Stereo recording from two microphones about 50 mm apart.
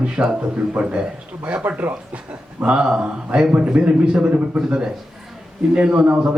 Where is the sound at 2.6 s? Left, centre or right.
Right.